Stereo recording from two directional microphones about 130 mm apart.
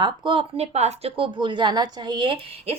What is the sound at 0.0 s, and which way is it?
Speech, 45° right (ahead or behind).